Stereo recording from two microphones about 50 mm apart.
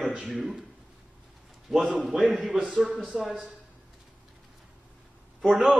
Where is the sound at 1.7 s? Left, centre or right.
Centre.